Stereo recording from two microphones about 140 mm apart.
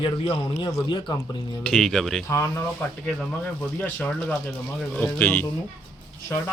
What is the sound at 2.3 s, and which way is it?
Speech, 20° left (ahead or behind).